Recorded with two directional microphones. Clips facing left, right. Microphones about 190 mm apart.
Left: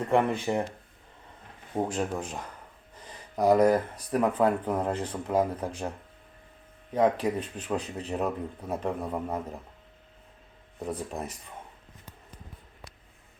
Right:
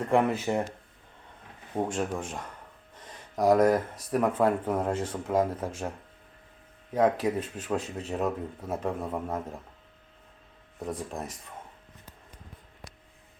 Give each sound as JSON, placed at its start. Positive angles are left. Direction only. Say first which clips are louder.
{"t": 0.0, "sound": "speech", "louder": "even", "side_deg": 0}
{"t": 1.7, "sound": "speech", "louder": "even", "side_deg": 0}
{"t": 6.9, "sound": "speech", "louder": "even", "side_deg": 0}
{"t": 10.8, "sound": "speech", "louder": "left 1 dB", "side_deg": 0}